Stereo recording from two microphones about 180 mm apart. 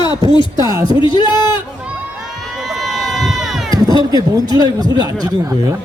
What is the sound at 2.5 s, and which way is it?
Run, centre (ahead or behind).